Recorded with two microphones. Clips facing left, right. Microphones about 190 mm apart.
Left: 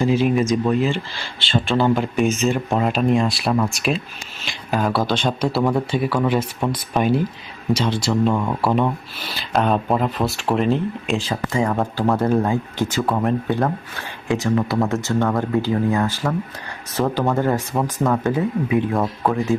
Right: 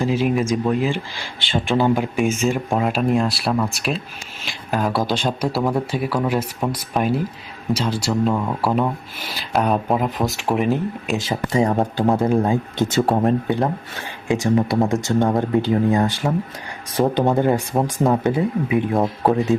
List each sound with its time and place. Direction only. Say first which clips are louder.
0.0 s speech: left 2 dB; 5° right (ahead or behind)
4.9 s speech: left 1 dB; 15° right (ahead or behind)
11.5 s speech: right 3 dB; 30° right (ahead or behind)
12.2 s speech: right 1 dB; 10° right (ahead or behind)
13.1 s speech: right 2 dB; 30° right (ahead or behind)
14.3 s speech: right 2 dB; 20° right (ahead or behind)
18.9 s speech: right 2 dB; 35° right (ahead or behind)